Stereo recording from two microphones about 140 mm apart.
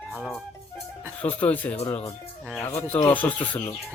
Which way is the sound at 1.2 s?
10° left (ahead or behind).